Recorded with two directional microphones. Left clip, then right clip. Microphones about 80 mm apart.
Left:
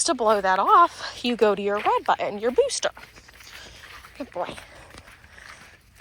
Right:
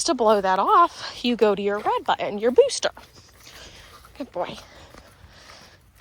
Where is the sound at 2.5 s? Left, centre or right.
Right.